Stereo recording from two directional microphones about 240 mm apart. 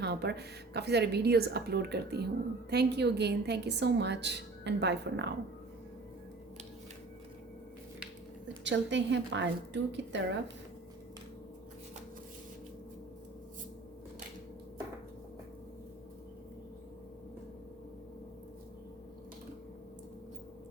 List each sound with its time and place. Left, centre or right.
0.0 s a woman's voice: right
8.6 s a woman's voice: right